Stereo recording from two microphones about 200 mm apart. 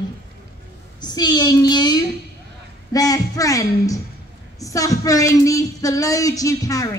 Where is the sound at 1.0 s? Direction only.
20° left (ahead or behind).